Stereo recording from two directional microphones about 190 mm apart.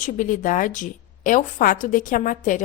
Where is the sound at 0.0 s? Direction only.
45° left (ahead or behind).